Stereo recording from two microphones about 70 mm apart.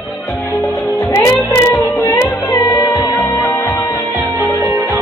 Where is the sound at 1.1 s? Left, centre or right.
Left.